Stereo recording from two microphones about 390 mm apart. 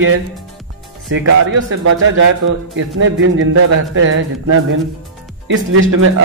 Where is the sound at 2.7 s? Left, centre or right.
Right.